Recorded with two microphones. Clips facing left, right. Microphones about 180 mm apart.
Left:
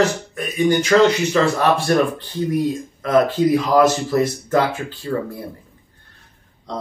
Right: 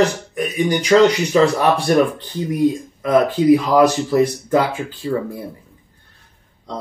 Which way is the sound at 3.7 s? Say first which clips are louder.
Right 2 dB; 15° right (ahead or behind).